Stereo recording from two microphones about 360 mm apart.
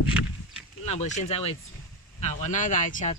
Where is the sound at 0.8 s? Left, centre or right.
Centre.